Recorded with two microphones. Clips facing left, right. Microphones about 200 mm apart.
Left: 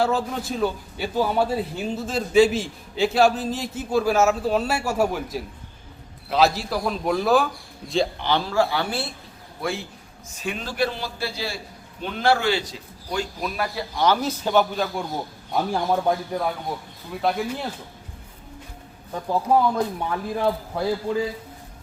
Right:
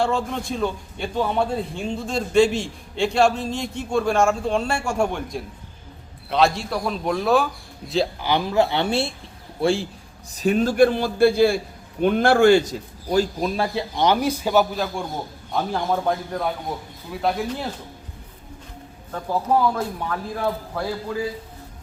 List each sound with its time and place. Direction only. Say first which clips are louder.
0.0 s a man's voice: even; 5° left (ahead or behind)
8.3 s a man's voice: right 3 dB; 15° right (ahead or behind); by 13.2 s 45° right (ahead or behind)
13.4 s a man's voice: right 4 dB; 25° right (ahead or behind); by 17.7 s centre (ahead or behind)
19.8 s a man's voice: left 2 dB; 15° left (ahead or behind)